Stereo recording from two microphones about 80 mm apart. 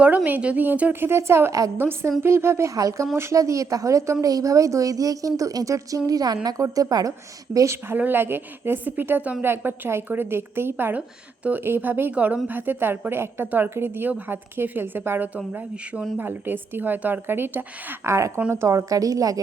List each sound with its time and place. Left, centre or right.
0.3 s a woman's voice: centre
2.7 s speech: right
3.2 s speech: right
7.9 s a woman's voice: right